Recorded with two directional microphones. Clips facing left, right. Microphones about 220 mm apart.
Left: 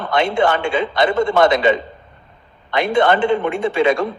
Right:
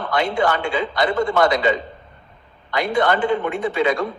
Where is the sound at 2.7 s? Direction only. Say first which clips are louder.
Left 4 dB; 25° left (ahead or behind).